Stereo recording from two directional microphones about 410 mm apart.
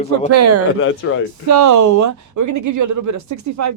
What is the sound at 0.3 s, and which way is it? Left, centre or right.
Speech, right.